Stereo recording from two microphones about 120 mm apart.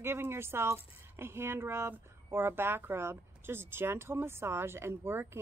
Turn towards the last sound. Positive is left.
turn(degrees=-20)  # may be behind; listen again after turning